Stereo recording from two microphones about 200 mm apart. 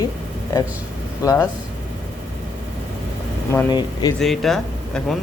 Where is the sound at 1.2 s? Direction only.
15° left (ahead or behind).